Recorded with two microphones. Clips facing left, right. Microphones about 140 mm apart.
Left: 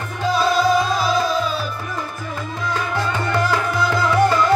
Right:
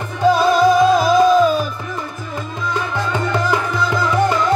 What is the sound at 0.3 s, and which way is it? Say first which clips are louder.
Music: right 4 dB; 45° right (ahead or behind).